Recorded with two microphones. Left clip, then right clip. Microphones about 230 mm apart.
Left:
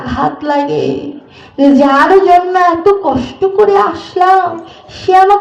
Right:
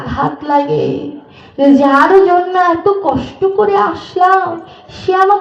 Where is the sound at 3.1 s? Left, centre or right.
Left.